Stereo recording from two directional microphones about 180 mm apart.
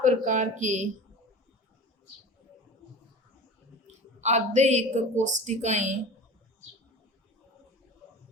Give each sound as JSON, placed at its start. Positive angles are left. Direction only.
{"t": 0.0, "sound": "speech", "side_deg": -45}
{"t": 4.2, "sound": "a woman's voice", "side_deg": -40}